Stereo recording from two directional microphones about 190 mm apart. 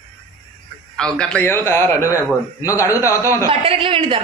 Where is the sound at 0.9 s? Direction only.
5° left (ahead or behind).